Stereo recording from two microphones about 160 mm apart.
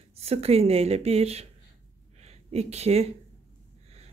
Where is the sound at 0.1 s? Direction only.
40° right (ahead or behind).